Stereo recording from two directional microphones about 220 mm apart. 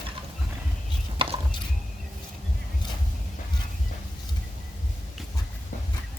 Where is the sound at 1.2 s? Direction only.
25° right (ahead or behind).